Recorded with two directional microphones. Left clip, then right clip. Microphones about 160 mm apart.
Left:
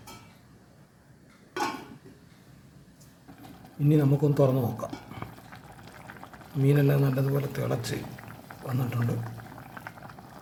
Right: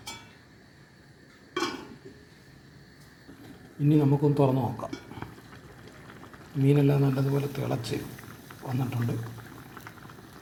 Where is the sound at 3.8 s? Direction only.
15° left (ahead or behind).